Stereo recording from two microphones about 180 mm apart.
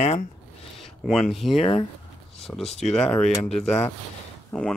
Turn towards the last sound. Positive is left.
turn(degrees=5)  # may be behind; listen again after turning